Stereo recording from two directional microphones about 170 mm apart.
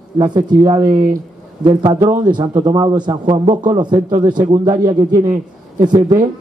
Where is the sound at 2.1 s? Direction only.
25° right (ahead or behind).